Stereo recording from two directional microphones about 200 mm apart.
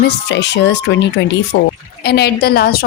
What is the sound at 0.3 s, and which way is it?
A woman's voice, 60° left (ahead or behind).